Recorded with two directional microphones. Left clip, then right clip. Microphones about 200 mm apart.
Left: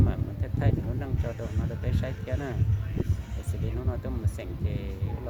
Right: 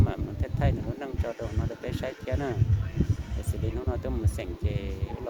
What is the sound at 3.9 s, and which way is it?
Speech, 10° right (ahead or behind).